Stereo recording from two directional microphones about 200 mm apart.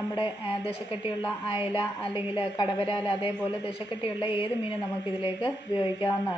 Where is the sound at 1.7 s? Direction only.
25° left (ahead or behind).